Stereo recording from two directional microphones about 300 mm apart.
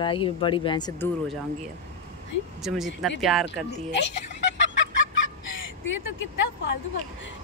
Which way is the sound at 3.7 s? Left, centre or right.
Left.